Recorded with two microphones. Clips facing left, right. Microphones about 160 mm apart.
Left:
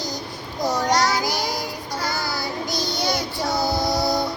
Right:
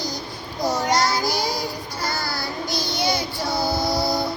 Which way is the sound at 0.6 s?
10° right (ahead or behind).